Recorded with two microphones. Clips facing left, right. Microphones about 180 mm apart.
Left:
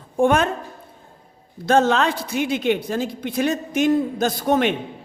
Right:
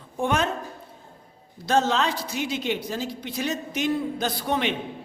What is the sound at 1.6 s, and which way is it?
A man's voice, 55° left (ahead or behind).